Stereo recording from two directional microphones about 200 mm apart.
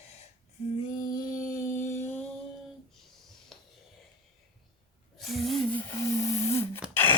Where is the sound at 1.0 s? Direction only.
20° left (ahead or behind).